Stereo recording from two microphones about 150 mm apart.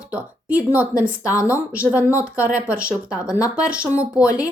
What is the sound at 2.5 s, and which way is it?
Speech, 10° right (ahead or behind).